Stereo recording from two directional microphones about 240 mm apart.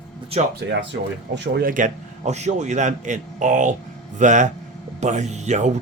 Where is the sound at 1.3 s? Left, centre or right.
Right.